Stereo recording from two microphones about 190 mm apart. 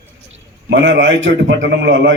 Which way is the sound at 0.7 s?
70° right (ahead or behind).